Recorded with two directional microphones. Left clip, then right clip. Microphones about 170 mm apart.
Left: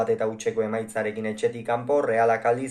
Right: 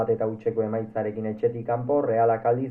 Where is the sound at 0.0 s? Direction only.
20° left (ahead or behind).